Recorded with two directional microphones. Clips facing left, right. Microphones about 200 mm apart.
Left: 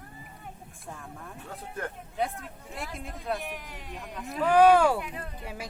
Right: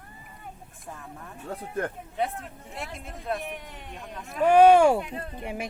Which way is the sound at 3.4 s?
25° right (ahead or behind).